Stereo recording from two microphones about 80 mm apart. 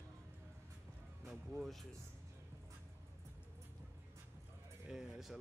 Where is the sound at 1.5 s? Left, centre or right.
Centre.